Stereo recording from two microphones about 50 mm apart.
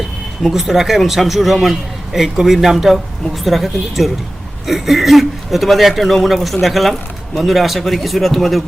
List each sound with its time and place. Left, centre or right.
0.4 s speech: centre